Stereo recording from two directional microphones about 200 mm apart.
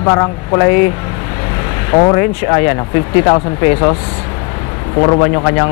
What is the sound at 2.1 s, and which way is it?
Speech, 15° left (ahead or behind).